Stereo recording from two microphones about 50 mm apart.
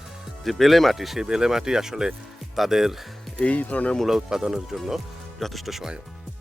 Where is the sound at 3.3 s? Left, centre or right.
Left.